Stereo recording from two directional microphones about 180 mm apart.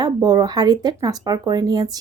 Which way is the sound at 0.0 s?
20° right (ahead or behind).